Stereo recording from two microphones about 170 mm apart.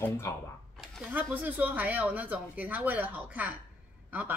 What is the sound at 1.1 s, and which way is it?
Speech, 10° right (ahead or behind).